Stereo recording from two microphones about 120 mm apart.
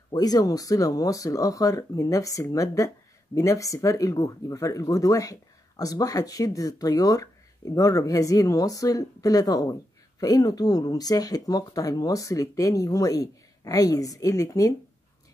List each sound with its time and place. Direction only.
0.1 s speech: 30° left (ahead or behind)